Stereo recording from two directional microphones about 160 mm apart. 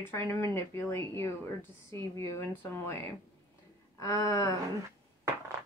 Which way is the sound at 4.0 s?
20° left (ahead or behind).